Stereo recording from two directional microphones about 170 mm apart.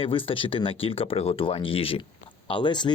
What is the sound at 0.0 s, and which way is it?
Speech, 30° left (ahead or behind).